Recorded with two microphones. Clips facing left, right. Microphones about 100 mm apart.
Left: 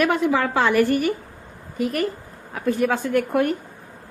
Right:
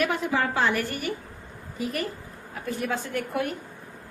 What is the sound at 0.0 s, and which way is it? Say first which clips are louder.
A woman's voice: left 6 dB; 90° left.